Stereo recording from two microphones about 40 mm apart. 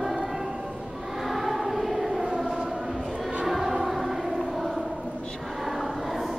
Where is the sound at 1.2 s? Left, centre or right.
Centre.